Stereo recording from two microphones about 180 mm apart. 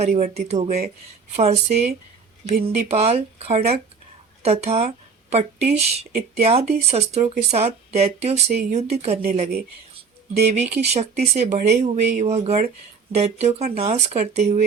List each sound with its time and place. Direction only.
0.0 s speech: 35° right (ahead or behind)
10.5 s speech: 35° right (ahead or behind)